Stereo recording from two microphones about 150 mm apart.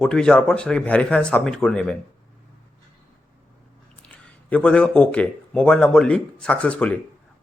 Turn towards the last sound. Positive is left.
turn(degrees=10)  # may be behind; listen again after turning